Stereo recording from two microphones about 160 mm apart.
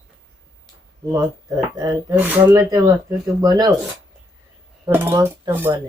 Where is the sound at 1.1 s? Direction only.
20° right (ahead or behind).